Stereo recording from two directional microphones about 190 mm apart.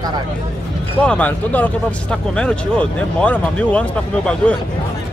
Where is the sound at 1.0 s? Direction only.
5° left (ahead or behind).